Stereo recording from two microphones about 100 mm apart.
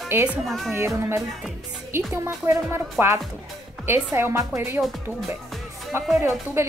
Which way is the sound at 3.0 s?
20° right (ahead or behind).